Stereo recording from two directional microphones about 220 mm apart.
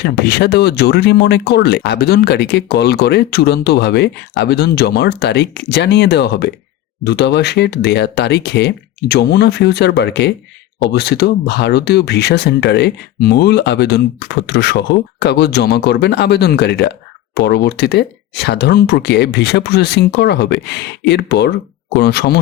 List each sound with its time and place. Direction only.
0.0 s speech: 45° left (ahead or behind)